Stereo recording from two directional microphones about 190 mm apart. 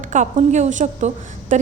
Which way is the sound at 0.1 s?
40° right (ahead or behind).